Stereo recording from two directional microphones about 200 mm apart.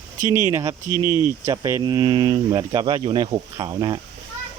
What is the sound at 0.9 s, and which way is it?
Speech, 20° left (ahead or behind).